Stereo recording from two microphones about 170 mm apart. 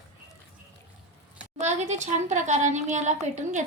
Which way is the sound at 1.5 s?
45° right (ahead or behind).